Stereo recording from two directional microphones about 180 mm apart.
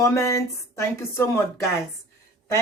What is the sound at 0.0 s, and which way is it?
Speech, 15° left (ahead or behind).